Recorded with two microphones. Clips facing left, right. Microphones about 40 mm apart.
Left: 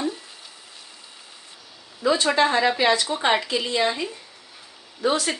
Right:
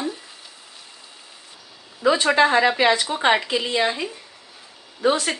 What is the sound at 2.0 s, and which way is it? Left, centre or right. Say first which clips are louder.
A woman's voice: right 3 dB; right.